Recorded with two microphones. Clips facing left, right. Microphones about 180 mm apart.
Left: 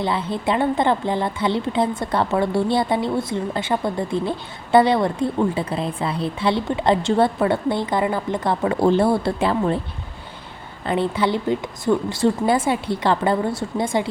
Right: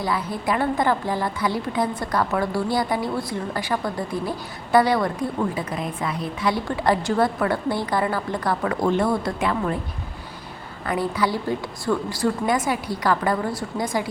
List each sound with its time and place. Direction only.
0.0 s a woman's voice: 25° left (ahead or behind)
10.8 s a woman's voice: 25° left (ahead or behind)